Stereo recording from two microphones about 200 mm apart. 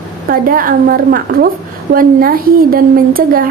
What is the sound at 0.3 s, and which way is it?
A woman's voice, 45° right (ahead or behind).